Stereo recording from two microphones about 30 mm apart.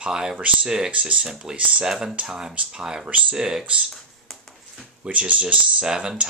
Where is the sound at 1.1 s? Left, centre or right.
Right.